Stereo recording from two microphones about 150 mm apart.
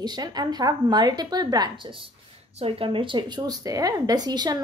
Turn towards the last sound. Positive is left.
turn(degrees=-25)  # may be behind; listen again after turning